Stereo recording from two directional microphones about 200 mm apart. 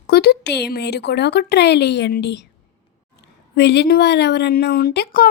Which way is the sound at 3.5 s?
55° left (ahead or behind).